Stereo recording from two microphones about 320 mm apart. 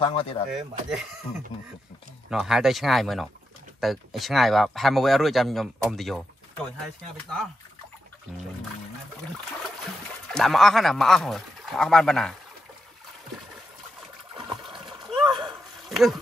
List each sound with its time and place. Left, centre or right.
0.0 s speech: centre
0.5 s speech: centre
2.2 s speech: centre
10.3 s speech: centre
14.3 s water: centre
15.1 s splash: centre
15.4 s bow-wow: centre